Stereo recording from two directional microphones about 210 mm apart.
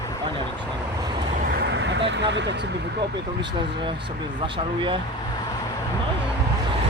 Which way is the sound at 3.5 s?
25° right (ahead or behind).